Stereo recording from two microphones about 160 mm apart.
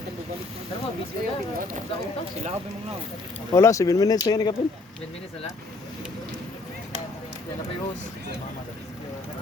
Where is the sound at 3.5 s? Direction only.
20° left (ahead or behind).